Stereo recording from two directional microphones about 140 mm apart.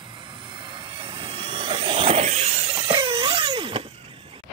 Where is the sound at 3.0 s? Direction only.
40° right (ahead or behind).